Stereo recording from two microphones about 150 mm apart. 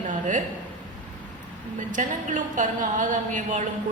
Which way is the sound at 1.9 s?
60° right (ahead or behind).